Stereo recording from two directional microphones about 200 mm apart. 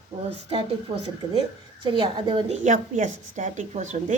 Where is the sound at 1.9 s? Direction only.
25° right (ahead or behind).